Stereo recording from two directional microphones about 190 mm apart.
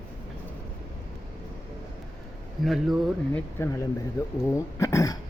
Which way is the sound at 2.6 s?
Centre (ahead or behind).